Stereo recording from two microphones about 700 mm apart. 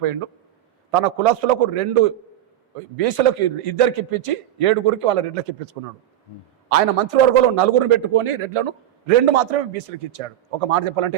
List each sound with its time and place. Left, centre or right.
0.0 s a man's voice: right